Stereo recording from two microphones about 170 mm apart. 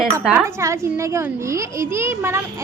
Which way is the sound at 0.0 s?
10° right (ahead or behind).